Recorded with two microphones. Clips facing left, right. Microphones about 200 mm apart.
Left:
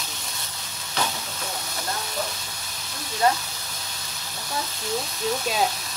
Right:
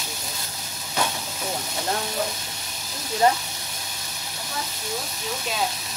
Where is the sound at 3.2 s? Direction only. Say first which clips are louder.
Right 2 dB; 25° right (ahead or behind).